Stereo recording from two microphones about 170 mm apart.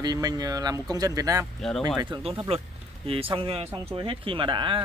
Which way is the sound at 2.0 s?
30° right (ahead or behind).